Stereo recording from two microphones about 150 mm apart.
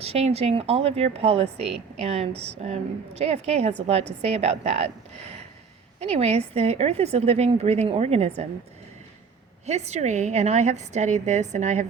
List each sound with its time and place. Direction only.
0.0 s speech: 45° right (ahead or behind)
6.0 s speech: 45° right (ahead or behind)
9.6 s speech: 45° right (ahead or behind)